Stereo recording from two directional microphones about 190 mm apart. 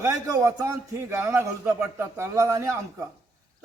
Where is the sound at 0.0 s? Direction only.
15° right (ahead or behind).